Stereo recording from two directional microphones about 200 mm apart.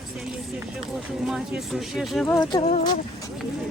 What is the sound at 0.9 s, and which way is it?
Speech, centre (ahead or behind).